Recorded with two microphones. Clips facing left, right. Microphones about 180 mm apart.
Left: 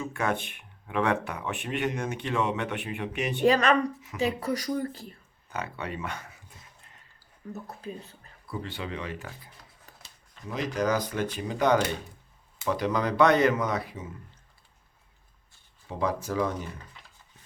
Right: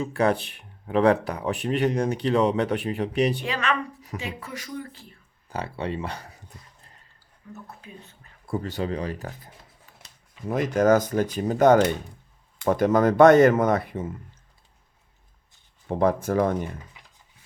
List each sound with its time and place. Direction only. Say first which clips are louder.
0.0 s speech: right 6 dB; 35° right (ahead or behind)
3.4 s speech: left 6 dB; 40° left (ahead or behind)
5.5 s speech: right 5 dB; 30° right (ahead or behind)
7.5 s speech: left 4 dB; 35° left (ahead or behind)
8.4 s speech: right 7 dB; 45° right (ahead or behind)
10.4 s speech: right 7 dB; 50° right (ahead or behind)
15.9 s speech: right 7 dB; 55° right (ahead or behind)
16.9 s a sound: even; 10° right (ahead or behind)